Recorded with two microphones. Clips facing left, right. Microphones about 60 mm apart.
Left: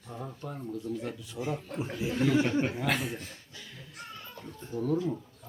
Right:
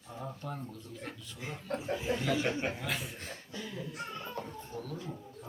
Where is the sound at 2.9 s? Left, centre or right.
Left.